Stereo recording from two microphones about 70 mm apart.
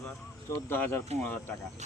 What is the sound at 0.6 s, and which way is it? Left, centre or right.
Speech, left.